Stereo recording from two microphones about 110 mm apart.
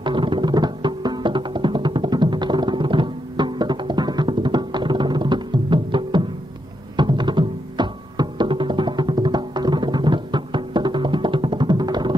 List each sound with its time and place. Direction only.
0.0 s music: 45° right (ahead or behind)